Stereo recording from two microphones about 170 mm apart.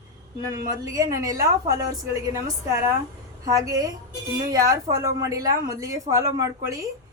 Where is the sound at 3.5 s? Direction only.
20° right (ahead or behind).